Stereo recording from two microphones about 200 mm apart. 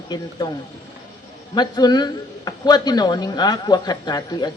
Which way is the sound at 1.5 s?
20° left (ahead or behind).